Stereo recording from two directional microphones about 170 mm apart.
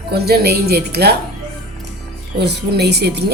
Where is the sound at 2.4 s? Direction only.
80° right.